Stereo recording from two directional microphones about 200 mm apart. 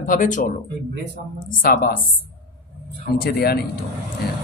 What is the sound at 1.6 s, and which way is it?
Speech, 45° left (ahead or behind).